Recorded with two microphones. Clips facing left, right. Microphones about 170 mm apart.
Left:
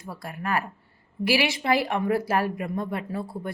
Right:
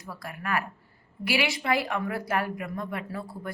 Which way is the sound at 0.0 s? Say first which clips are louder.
Left 3 dB; 25° left (ahead or behind).